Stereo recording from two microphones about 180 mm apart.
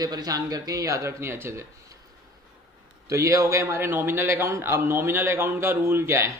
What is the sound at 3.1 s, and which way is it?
A man's voice, 15° right (ahead or behind).